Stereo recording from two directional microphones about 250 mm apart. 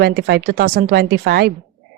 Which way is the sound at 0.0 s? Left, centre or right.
Right.